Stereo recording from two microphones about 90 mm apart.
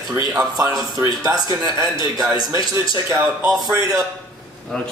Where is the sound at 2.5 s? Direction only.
45° right (ahead or behind).